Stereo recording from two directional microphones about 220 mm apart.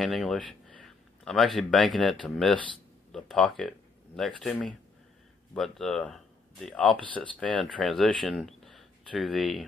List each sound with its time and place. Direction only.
0.0 s speech: centre (ahead or behind)